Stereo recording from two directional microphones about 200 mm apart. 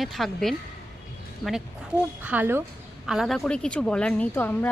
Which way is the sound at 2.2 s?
10° right (ahead or behind).